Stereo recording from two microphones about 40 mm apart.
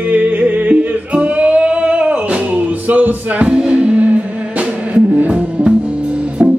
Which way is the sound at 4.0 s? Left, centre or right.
Right.